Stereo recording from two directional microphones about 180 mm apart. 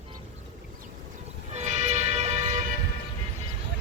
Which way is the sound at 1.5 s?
40° right (ahead or behind).